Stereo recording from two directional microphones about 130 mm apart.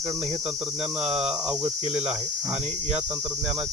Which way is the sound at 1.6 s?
55° right (ahead or behind).